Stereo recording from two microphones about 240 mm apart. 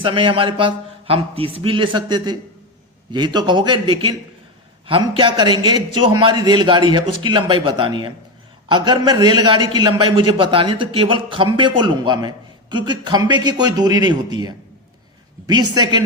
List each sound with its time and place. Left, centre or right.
0.0 s a man's voice: right
15.7 s a man's voice: centre